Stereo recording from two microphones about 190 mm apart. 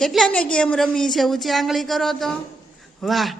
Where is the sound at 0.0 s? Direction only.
Centre (ahead or behind).